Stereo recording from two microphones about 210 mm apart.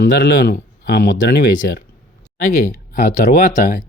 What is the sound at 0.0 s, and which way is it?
Speech, 45° left (ahead or behind).